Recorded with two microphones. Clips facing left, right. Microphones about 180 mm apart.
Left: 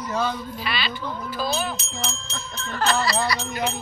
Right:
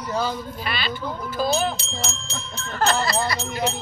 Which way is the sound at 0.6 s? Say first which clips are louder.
Right 1 dB; 50° right (ahead or behind).